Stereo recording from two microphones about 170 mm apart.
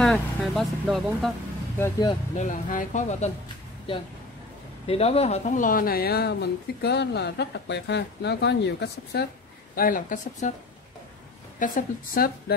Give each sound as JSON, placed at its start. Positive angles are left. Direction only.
{"t": 0.0, "sound": "speech", "side_deg": 0}
{"t": 1.8, "sound": "speech", "side_deg": 20}
{"t": 2.3, "sound": "speech", "side_deg": 45}
{"t": 4.8, "sound": "speech", "side_deg": 35}
{"t": 6.8, "sound": "speech", "side_deg": 80}
{"t": 9.8, "sound": "speech", "side_deg": 55}
{"t": 11.6, "sound": "speech", "side_deg": 55}